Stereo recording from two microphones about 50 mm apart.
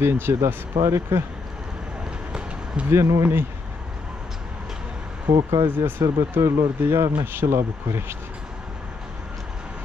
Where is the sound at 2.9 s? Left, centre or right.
Right.